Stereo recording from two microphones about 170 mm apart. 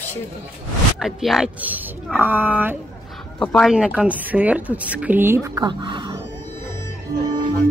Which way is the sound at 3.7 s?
5° right (ahead or behind).